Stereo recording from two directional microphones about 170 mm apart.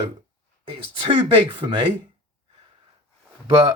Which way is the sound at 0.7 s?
30° right (ahead or behind).